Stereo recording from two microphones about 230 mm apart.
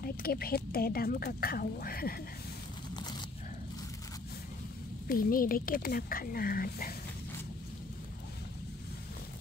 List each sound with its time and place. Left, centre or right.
0.0 s speech: left
3.0 s a sound: centre
5.0 s speech: left